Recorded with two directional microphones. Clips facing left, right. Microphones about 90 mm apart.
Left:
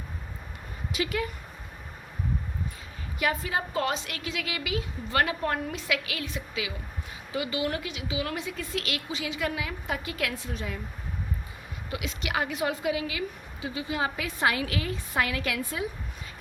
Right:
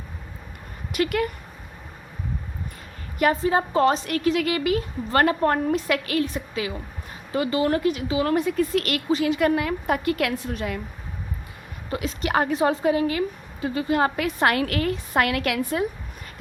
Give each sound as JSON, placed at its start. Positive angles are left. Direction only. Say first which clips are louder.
{"t": 0.9, "sound": "speech", "louder": "right 7 dB", "side_deg": -60}
{"t": 3.4, "sound": "a woman's voice", "louder": "right 9 dB", "side_deg": -35}
{"t": 11.9, "sound": "a woman's voice", "louder": "right 7 dB", "side_deg": -40}